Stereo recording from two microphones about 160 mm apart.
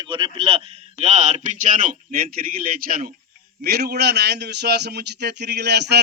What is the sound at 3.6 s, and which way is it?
A man's voice, 80° right.